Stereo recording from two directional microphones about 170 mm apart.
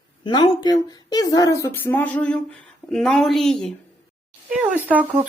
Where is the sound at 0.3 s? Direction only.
25° left (ahead or behind); by 3.8 s 5° left (ahead or behind).